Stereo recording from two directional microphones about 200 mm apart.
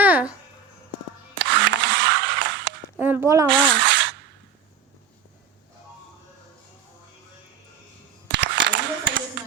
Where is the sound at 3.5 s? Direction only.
70° right (ahead or behind).